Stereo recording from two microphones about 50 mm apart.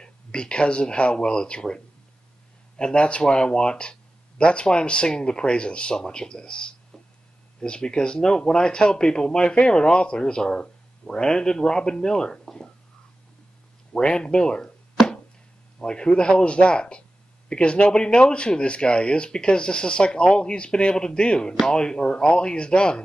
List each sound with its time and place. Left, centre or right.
0.0 s speech: centre
2.8 s speech: centre
13.9 s speech: centre
15.8 s speech: centre